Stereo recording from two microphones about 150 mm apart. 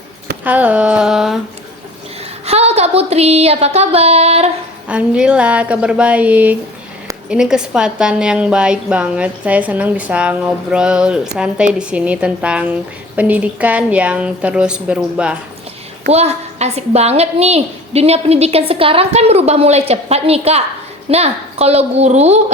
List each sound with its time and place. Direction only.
0.4 s a woman's voice: 10° right (ahead or behind)
2.5 s a sound: 45° right (ahead or behind)
4.9 s a woman's voice: 5° right (ahead or behind)
16.0 s a woman's voice: 45° right (ahead or behind)